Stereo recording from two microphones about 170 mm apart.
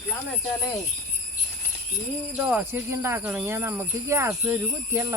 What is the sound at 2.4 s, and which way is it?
Speech, 10° right (ahead or behind).